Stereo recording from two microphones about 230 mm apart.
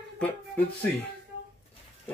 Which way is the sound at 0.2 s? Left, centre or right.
Centre.